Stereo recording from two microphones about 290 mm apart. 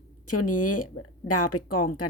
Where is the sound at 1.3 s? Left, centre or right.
Left.